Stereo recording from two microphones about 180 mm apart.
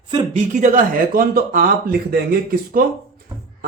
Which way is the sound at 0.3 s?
45° right (ahead or behind).